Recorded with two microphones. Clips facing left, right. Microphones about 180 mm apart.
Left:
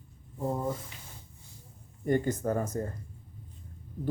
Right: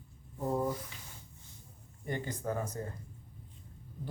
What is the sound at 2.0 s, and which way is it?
Speech, 50° left (ahead or behind).